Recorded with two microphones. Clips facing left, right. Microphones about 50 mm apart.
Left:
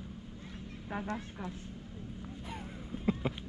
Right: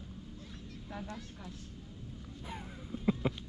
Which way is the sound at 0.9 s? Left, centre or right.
Left.